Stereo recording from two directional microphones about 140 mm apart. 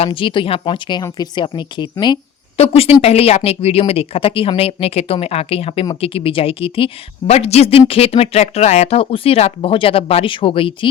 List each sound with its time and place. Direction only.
0.0 s speech: 40° left (ahead or behind)
2.6 s a woman's voice: 45° left (ahead or behind)
9.0 s speech: 40° left (ahead or behind)